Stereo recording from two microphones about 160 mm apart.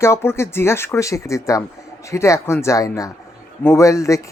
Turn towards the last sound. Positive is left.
turn(degrees=20)  # may be behind; listen again after turning